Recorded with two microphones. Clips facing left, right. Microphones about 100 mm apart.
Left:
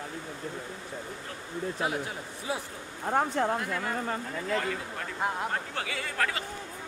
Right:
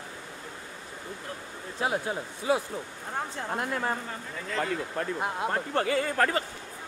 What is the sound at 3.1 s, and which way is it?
Speech, 70° left (ahead or behind).